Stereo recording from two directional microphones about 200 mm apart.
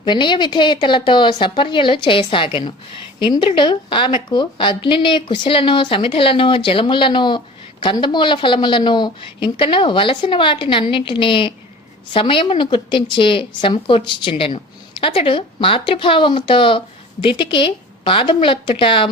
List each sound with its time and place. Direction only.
0.0 s a woman's voice: 25° left (ahead or behind)